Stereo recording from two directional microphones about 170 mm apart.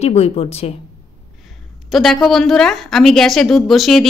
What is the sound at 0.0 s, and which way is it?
Speech, 35° left (ahead or behind).